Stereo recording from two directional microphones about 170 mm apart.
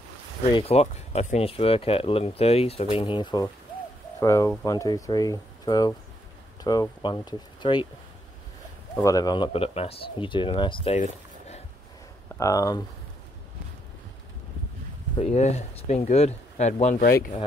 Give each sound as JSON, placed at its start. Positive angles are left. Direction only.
{"t": 0.5, "sound": "speech", "side_deg": 30}
{"t": 9.0, "sound": "speech", "side_deg": 20}
{"t": 11.0, "sound": "a sound", "side_deg": 40}
{"t": 12.4, "sound": "speech", "side_deg": 20}
{"t": 15.1, "sound": "speech", "side_deg": 40}